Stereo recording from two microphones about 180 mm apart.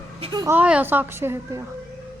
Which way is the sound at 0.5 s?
10° right (ahead or behind).